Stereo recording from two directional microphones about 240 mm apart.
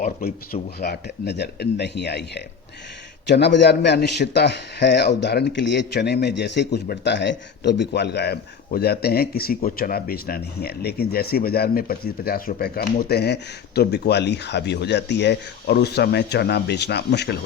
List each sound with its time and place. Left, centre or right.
0.0 s speech: left